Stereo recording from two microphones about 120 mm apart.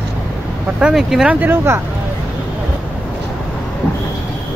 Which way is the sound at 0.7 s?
5° right (ahead or behind).